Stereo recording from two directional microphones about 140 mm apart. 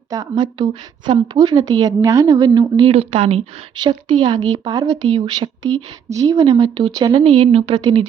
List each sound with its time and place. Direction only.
0.1 s a woman's voice: 30° right (ahead or behind)
2.9 s speech: 45° right (ahead or behind)
3.8 s a woman's voice: 35° right (ahead or behind)